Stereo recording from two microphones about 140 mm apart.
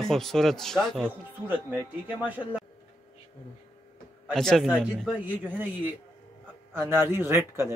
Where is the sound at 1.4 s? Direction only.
15° right (ahead or behind).